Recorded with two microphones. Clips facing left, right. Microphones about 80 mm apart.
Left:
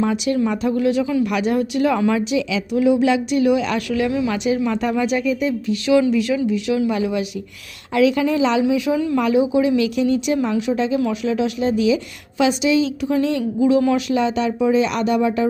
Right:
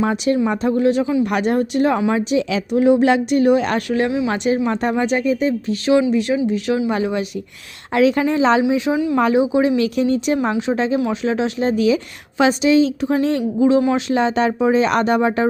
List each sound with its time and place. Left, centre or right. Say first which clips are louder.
0.0 s speech: right 1 dB; right
1.2 s speech: right 1 dB; right
2.5 s speech: right 3 dB; right